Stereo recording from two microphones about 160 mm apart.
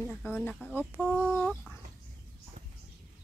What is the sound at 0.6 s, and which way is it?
Speech, 5° right (ahead or behind).